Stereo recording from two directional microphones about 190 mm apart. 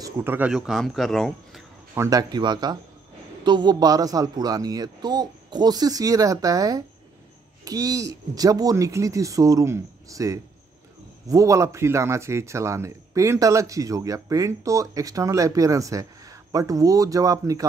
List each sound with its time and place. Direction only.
0.0 s speech: 10° right (ahead or behind)
2.0 s speech: 20° right (ahead or behind)